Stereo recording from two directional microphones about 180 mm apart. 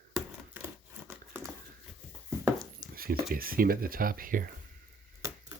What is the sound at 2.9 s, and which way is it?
Speech, 55° right (ahead or behind).